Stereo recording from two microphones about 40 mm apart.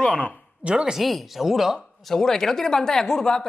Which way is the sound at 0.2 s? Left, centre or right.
Right.